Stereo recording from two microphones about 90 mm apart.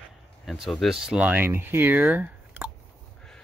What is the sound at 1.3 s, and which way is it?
Speech, 20° right (ahead or behind).